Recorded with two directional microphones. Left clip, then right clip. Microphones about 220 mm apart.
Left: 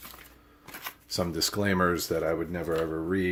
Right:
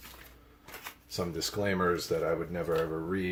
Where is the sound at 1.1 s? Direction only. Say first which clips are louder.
Left 5 dB; 50° left (ahead or behind).